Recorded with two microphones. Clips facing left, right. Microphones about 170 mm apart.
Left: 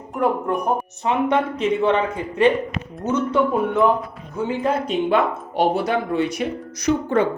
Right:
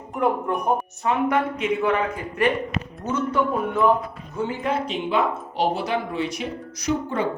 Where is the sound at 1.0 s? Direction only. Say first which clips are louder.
Left 2 dB; 25° left (ahead or behind).